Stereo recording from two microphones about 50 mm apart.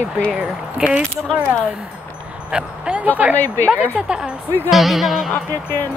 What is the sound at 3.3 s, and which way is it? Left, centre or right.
Speech, left.